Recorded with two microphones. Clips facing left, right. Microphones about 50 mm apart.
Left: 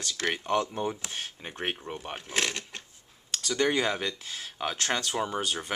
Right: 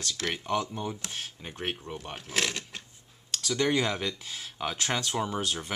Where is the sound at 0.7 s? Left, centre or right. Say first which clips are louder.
Left 3 dB; centre.